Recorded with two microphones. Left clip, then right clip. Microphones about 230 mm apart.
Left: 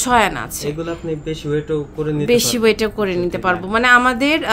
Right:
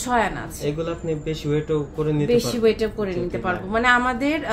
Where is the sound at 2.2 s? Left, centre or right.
Left.